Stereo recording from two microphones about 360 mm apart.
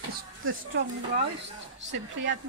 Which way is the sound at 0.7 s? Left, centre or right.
Right.